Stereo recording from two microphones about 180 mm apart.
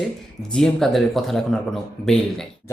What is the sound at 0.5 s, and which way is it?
Speech, 5° left (ahead or behind).